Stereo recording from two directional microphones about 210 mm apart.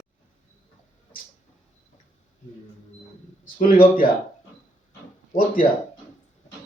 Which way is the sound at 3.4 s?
40° left (ahead or behind).